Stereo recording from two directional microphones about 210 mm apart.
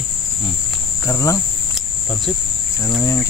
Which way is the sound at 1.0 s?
15° left (ahead or behind).